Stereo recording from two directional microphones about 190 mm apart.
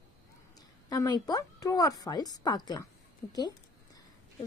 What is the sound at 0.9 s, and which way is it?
A woman's voice, 20° left (ahead or behind).